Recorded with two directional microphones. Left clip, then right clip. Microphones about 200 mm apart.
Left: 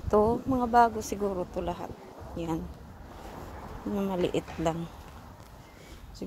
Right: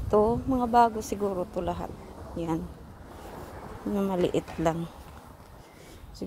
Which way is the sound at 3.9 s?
15° right (ahead or behind).